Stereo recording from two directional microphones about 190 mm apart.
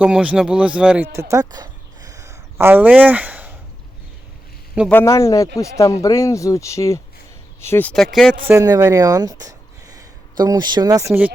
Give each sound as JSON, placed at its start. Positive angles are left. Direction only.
{"t": 0.0, "sound": "a man's voice", "side_deg": -5}
{"t": 1.1, "sound": "a sound", "side_deg": -15}
{"t": 4.9, "sound": "speech", "side_deg": 10}
{"t": 8.4, "sound": "speech", "side_deg": -15}